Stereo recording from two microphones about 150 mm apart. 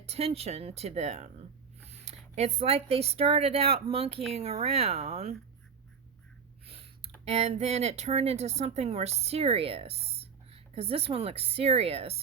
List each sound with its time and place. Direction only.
0.0 s speech: 45° right (ahead or behind)
6.7 s a sound: 40° right (ahead or behind)
7.3 s speech: 45° right (ahead or behind)